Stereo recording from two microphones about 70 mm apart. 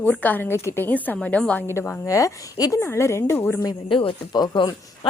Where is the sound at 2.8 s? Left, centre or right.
Left.